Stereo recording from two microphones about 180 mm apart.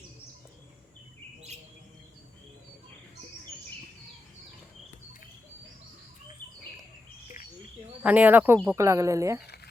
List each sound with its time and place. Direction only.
8.0 s speech: 10° right (ahead or behind)